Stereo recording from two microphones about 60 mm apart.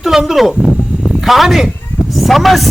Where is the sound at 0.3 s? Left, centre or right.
Centre.